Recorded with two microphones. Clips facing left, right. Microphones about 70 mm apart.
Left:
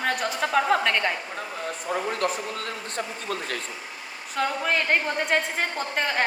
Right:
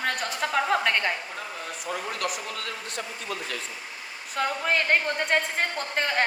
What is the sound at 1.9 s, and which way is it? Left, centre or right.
Speech, left.